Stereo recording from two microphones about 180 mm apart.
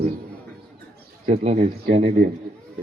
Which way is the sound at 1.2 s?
35° right (ahead or behind).